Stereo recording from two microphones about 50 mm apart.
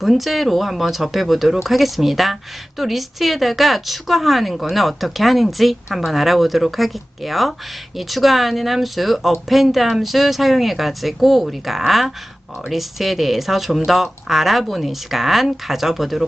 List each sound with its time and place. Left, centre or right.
0.0 s speech: centre